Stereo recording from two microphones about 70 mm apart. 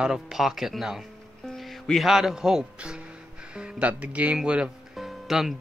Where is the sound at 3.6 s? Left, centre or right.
Right.